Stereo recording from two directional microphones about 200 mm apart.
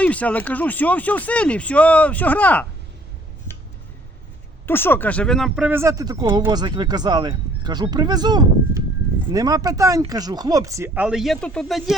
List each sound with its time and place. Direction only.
0.0 s speech: 5° left (ahead or behind)
4.6 s speech: 10° left (ahead or behind)